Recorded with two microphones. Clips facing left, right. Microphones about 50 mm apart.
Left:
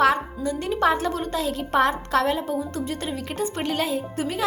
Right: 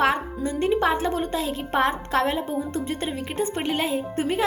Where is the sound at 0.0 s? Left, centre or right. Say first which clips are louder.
Left 2 dB; right.